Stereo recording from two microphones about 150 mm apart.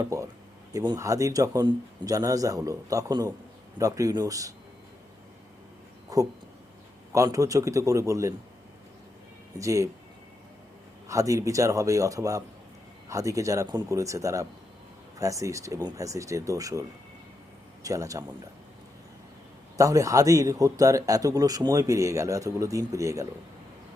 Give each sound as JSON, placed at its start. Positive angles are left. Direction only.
{"t": 0.0, "sound": "speech", "side_deg": -20}
{"t": 6.1, "sound": "speech", "side_deg": -25}
{"t": 9.6, "sound": "speech", "side_deg": -20}
{"t": 11.1, "sound": "speech", "side_deg": -20}
{"t": 17.8, "sound": "speech", "side_deg": -20}
{"t": 19.7, "sound": "speech", "side_deg": -20}